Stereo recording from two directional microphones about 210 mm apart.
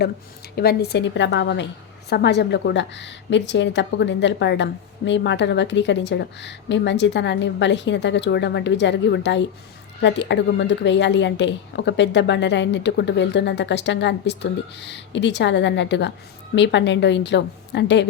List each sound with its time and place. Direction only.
0.5 s a woman's voice: 50° left (ahead or behind)